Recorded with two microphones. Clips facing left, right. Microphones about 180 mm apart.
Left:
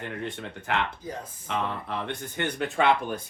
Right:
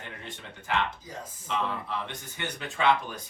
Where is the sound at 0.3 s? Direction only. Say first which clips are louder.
Right 1 dB; 55° left (ahead or behind).